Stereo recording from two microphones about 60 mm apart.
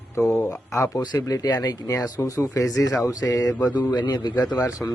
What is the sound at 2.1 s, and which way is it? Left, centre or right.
Speech, left.